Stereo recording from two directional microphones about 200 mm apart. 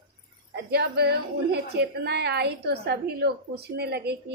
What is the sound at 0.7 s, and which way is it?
A woman's voice, 55° right (ahead or behind).